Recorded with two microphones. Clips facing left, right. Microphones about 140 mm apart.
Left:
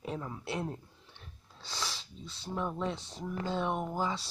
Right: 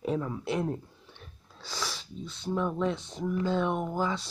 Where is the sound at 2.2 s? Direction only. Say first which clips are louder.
Right 9 dB; 30° left (ahead or behind).